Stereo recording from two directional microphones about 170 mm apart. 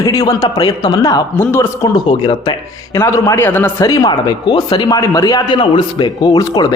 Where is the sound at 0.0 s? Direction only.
20° left (ahead or behind).